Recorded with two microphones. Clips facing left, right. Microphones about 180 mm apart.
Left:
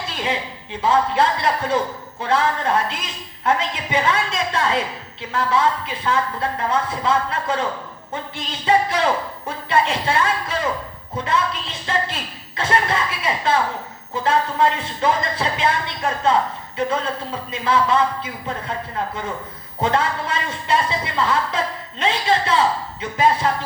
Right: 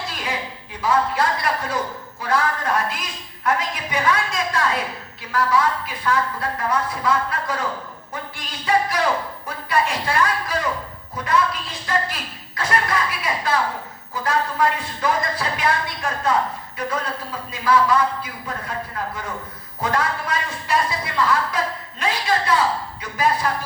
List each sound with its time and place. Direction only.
0.1 s a woman's voice: 25° left (ahead or behind)